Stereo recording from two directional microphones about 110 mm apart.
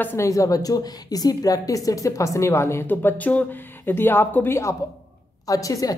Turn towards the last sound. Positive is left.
turn(degrees=30)  # may be behind; listen again after turning